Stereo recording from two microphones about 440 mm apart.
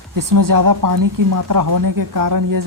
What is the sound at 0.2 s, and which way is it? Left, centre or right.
Speech, right.